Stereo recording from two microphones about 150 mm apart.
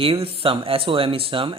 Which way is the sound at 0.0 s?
40° right (ahead or behind).